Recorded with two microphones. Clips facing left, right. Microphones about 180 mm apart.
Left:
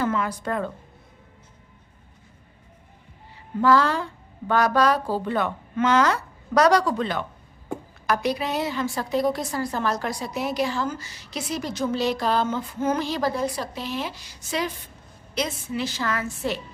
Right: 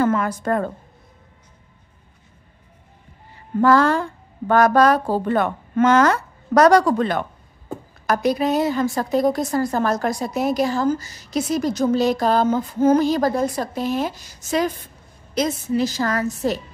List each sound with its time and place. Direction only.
0.0 s speech: 50° right (ahead or behind)
3.6 s a woman's voice: 50° right (ahead or behind)